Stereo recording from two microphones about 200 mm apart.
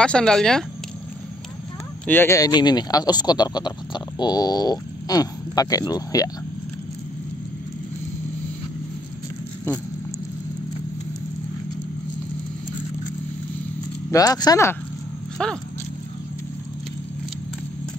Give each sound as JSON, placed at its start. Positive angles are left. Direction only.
{"t": 0.0, "sound": "speech", "side_deg": 5}
{"t": 2.0, "sound": "speech", "side_deg": 10}
{"t": 14.1, "sound": "speech", "side_deg": 20}
{"t": 15.3, "sound": "speech", "side_deg": 5}